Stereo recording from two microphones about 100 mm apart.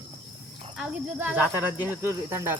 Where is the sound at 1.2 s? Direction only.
15° right (ahead or behind).